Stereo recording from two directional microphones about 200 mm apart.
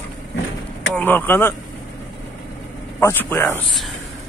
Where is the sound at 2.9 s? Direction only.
10° left (ahead or behind).